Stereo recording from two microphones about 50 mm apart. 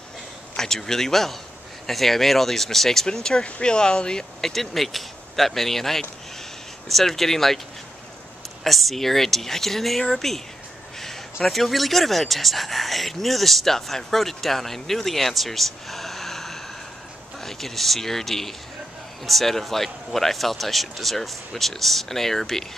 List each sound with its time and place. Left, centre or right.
0.6 s speech: centre
4.4 s speech: centre
8.6 s speech: centre
11.4 s speech: centre